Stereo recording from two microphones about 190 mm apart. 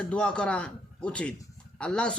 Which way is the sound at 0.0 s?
5° left (ahead or behind).